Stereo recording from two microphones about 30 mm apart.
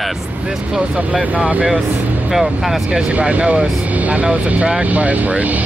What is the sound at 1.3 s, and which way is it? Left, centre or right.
Speech, right.